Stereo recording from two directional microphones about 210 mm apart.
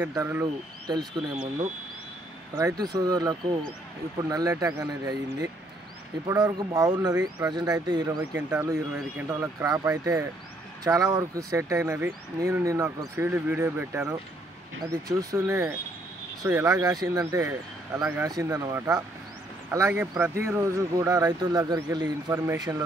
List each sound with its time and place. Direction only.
0.1 s speech: 10° right (ahead or behind)
2.6 s speech: 20° right (ahead or behind)